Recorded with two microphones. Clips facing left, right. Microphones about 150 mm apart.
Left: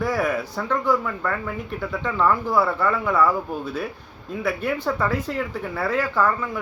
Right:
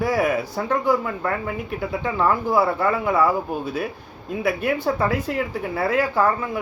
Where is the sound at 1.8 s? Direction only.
15° right (ahead or behind).